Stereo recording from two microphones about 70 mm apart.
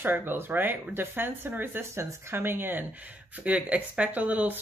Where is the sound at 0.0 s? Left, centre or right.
Right.